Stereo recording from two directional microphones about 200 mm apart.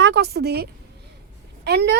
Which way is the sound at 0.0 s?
55° right (ahead or behind).